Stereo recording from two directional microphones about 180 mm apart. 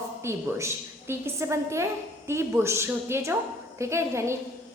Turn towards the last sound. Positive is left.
turn(degrees=-15)  # may be behind; listen again after turning